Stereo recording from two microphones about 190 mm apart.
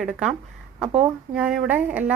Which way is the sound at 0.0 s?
Centre (ahead or behind).